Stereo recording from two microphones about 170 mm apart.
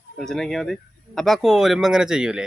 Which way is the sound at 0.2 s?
5° left (ahead or behind).